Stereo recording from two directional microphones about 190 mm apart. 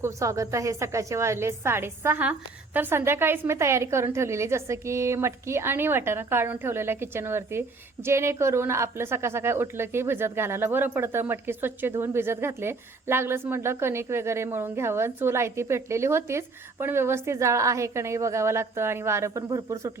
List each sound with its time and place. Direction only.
0.0 s a woman's voice: 15° right (ahead or behind)